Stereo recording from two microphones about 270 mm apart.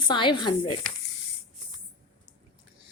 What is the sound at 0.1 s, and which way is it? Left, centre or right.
Speech, centre.